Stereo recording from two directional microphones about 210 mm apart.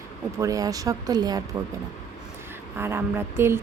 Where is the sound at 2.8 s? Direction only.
10° right (ahead or behind).